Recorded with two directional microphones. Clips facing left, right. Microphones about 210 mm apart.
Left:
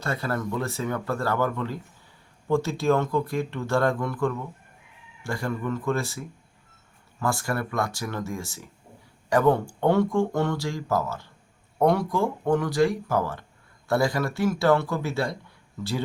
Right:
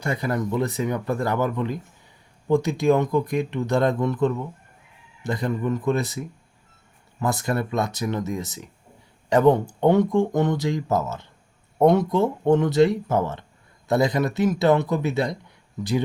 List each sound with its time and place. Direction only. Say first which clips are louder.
0.0 s speech: right 3 dB; 15° right (ahead or behind)